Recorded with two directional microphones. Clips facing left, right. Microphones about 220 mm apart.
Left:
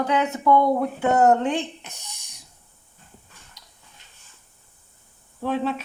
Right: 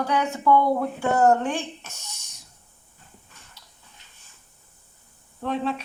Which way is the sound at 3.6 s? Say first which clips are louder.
Even; 15° left (ahead or behind).